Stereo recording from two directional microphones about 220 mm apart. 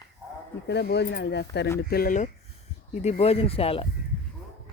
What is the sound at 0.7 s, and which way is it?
Speech, 50° left (ahead or behind).